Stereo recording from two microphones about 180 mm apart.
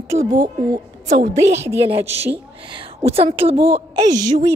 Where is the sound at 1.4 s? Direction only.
40° right (ahead or behind).